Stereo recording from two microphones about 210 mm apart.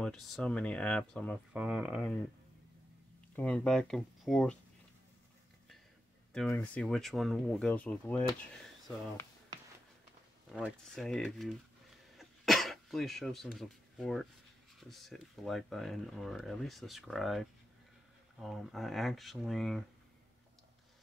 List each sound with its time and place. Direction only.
0.0 s speech: 5° left (ahead or behind)
1.5 s speech: 5° right (ahead or behind)
3.3 s speech: 5° left (ahead or behind)
6.5 s speech: 5° left (ahead or behind)
10.5 s speech: 5° right (ahead or behind)
12.2 s throat clearing: centre (ahead or behind)
14.8 s speech: centre (ahead or behind)